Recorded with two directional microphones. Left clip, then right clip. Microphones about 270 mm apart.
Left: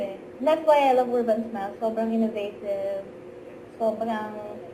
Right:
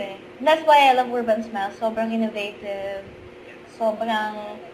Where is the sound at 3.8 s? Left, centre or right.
Centre.